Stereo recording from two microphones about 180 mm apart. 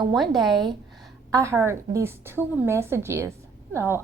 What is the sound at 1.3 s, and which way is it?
A woman's voice, 15° right (ahead or behind).